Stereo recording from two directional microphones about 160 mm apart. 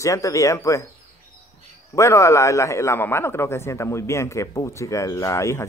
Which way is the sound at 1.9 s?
20° left (ahead or behind).